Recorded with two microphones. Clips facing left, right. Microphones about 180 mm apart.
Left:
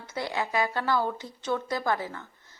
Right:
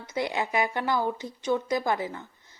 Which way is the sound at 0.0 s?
15° right (ahead or behind).